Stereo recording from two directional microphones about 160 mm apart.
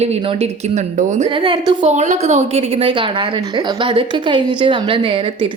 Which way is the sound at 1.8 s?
45° right (ahead or behind).